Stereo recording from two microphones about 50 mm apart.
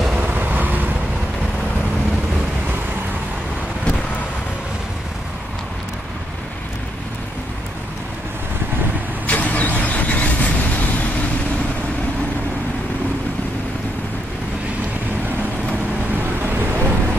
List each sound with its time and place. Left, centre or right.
0.1 s vehicle: right
9.2 s vehicle: left
16.4 s vehicle: right